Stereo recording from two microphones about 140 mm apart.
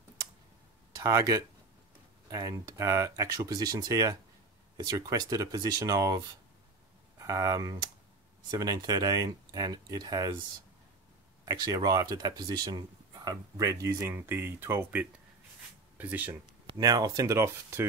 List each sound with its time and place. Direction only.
0.9 s speech: 25° right (ahead or behind)
11.4 s speech: 25° right (ahead or behind)
16.6 s speech: 30° right (ahead or behind)